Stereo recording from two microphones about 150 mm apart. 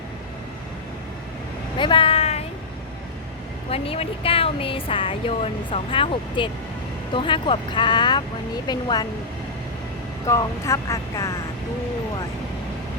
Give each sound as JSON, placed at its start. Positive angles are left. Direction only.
{"t": 1.8, "sound": "vehicle", "side_deg": 35}
{"t": 3.7, "sound": "speech", "side_deg": 40}
{"t": 10.2, "sound": "speech", "side_deg": 20}